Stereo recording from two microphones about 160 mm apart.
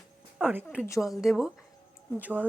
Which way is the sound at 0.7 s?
20° left (ahead or behind).